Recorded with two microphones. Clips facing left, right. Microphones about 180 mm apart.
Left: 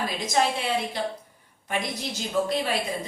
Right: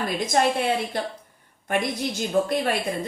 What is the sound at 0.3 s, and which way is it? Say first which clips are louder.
A woman's voice: right 3 dB; 50° right (ahead or behind).